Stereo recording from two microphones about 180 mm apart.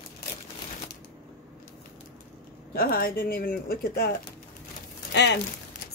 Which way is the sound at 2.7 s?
55° left (ahead or behind).